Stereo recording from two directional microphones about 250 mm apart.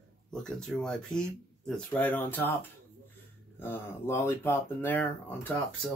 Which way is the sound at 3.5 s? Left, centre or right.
Centre.